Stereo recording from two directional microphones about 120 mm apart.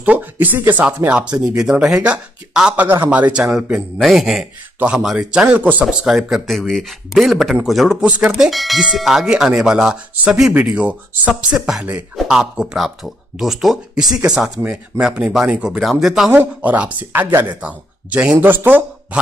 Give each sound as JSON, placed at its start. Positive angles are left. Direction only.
{"t": 0.0, "sound": "a man's voice", "side_deg": -15}